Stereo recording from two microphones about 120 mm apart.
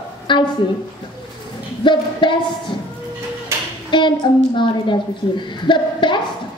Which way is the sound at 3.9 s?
40° left (ahead or behind).